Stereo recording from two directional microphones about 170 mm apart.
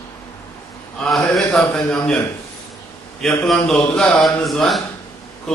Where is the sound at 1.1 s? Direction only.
5° left (ahead or behind).